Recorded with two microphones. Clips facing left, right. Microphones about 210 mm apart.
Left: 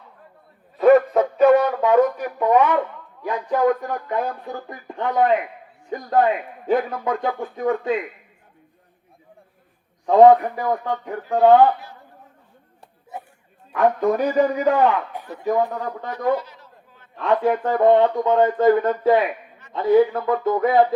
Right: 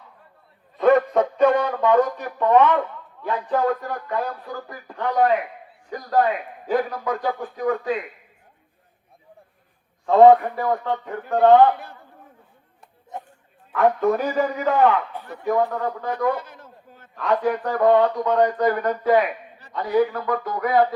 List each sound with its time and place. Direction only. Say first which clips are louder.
0.8 s a man's voice: left 3 dB; 5° left (ahead or behind)
4.1 s speech: left 1 dB; 25° left (ahead or behind)
10.1 s a man's voice: left 1 dB; 15° left (ahead or behind)
13.1 s bow-wow: even; 10° left (ahead or behind)
13.7 s a man's voice: left 1 dB; 15° left (ahead or behind)
16.1 s a sound: left 6 dB; 50° right (ahead or behind)
17.2 s speech: left 2 dB; 25° left (ahead or behind)